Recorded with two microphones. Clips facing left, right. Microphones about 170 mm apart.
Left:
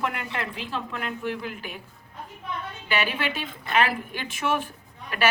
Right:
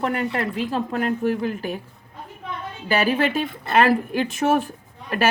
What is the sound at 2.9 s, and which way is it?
Speech, 40° right (ahead or behind).